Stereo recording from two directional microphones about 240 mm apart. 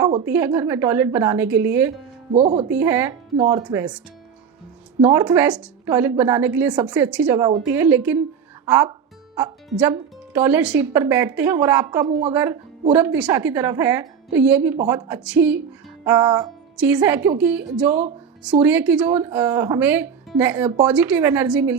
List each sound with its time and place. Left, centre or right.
0.0 s a sound: right
0.3 s a woman's voice: centre
2.3 s speech: right
2.6 s a woman's voice: centre
4.9 s a woman's voice: centre